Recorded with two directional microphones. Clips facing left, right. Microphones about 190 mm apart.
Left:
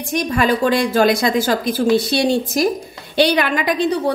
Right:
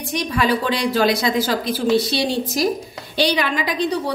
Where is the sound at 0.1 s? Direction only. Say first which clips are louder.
Left 3 dB; 50° left (ahead or behind).